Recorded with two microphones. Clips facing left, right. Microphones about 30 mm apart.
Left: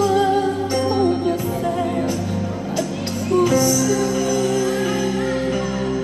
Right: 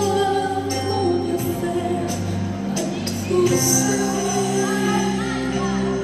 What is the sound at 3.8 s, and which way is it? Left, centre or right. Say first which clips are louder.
Music: left 2 dB; centre.